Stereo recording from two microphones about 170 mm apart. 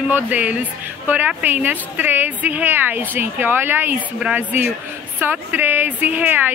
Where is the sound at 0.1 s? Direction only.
10° right (ahead or behind).